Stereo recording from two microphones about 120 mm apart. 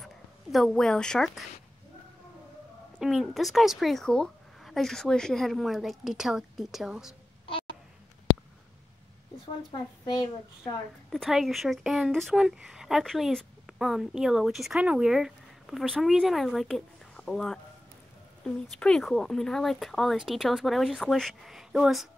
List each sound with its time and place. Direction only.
0.0 s speech: centre (ahead or behind)
3.0 s a woman's voice: centre (ahead or behind)
9.7 s a woman's voice: 40° left (ahead or behind)
11.1 s a woman's voice: centre (ahead or behind)